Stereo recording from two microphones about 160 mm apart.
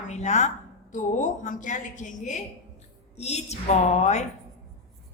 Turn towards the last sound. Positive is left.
turn(degrees=45)  # may be behind; listen again after turning